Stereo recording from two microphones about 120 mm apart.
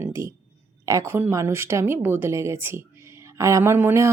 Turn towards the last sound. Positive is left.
turn(degrees=-20)  # may be behind; listen again after turning